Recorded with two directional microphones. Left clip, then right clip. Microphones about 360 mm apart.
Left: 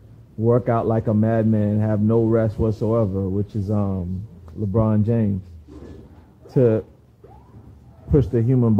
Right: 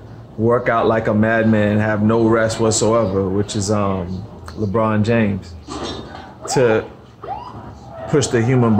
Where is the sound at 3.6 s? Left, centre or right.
Centre.